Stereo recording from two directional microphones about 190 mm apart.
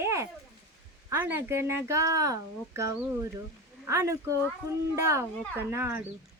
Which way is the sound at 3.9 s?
15° right (ahead or behind).